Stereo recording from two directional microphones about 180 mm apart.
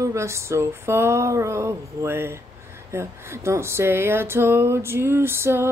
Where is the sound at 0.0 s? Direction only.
15° right (ahead or behind).